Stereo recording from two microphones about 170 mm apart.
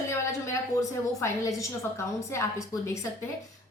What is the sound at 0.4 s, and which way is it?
A woman's voice, 20° left (ahead or behind).